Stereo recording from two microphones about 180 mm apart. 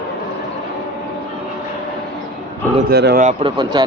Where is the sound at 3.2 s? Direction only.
25° right (ahead or behind).